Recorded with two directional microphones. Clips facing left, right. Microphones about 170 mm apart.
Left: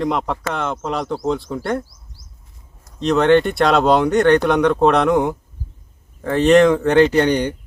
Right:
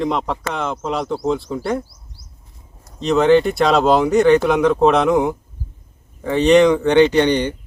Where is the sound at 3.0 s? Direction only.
Centre (ahead or behind).